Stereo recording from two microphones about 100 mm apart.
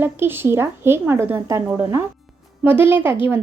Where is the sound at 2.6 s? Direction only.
20° right (ahead or behind).